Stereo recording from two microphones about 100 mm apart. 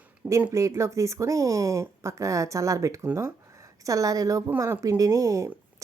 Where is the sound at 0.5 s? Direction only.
30° right (ahead or behind).